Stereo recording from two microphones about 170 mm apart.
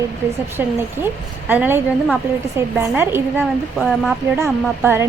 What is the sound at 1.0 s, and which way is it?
A woman's voice, 10° right (ahead or behind).